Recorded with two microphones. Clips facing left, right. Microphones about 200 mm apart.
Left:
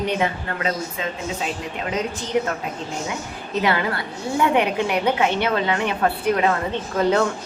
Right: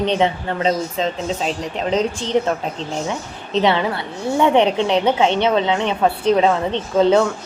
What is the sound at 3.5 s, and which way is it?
A woman's voice, 25° right (ahead or behind).